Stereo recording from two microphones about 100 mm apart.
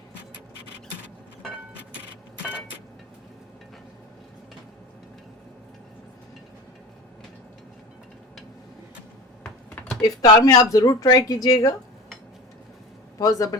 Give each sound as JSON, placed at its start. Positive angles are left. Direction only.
{"t": 2.4, "sound": "vehicle", "side_deg": -10}
{"t": 9.4, "sound": "a sound", "side_deg": 15}
{"t": 10.0, "sound": "speech", "side_deg": 40}
{"t": 13.1, "sound": "speech", "side_deg": 35}